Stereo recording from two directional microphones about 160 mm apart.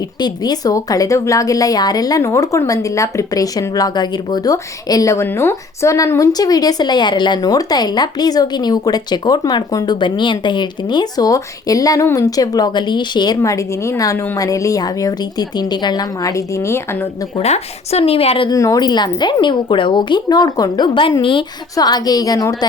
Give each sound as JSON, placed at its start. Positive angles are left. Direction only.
{"t": 0.2, "sound": "speech", "side_deg": 25}
{"t": 17.3, "sound": "speech", "side_deg": 40}
{"t": 18.5, "sound": "speech", "side_deg": 20}